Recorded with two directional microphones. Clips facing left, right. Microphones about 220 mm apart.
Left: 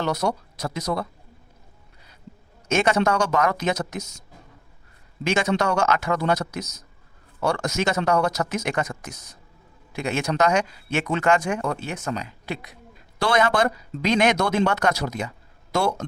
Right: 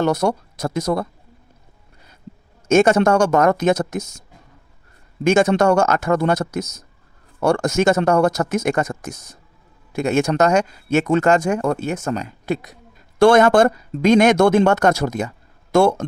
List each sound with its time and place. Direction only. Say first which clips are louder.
0.0 s speech: right 6 dB; 50° right (ahead or behind)
2.6 s speech: right 7 dB; 45° right (ahead or behind)
5.2 s speech: right 8 dB; 45° right (ahead or behind)